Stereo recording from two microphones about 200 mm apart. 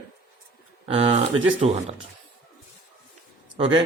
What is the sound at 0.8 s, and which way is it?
Speech, 30° right (ahead or behind).